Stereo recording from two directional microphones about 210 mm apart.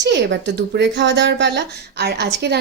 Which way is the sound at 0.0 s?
55° right (ahead or behind).